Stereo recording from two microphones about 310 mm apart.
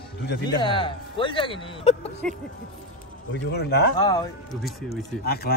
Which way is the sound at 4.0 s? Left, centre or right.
Centre.